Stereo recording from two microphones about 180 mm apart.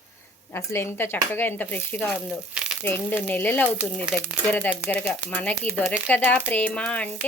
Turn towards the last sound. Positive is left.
turn(degrees=5)  # may be behind; listen again after turning